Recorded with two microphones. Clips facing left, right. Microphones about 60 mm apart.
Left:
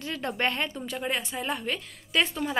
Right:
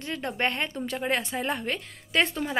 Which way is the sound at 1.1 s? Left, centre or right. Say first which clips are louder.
Right 2 dB; right.